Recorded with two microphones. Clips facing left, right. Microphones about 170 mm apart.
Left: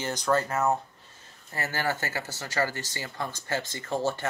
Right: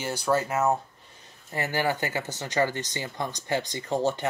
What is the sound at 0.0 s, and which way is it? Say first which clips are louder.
Speech: right 1 dB; 10° right (ahead or behind).